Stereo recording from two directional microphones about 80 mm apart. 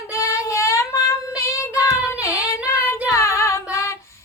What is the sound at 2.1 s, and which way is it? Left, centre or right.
Child singing, left.